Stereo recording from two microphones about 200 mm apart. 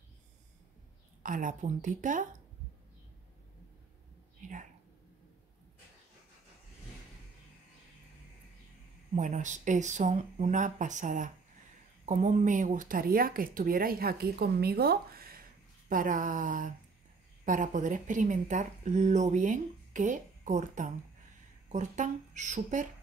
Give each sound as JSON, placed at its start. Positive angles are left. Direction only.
{"t": 1.2, "sound": "speech", "side_deg": -40}
{"t": 9.1, "sound": "speech", "side_deg": -40}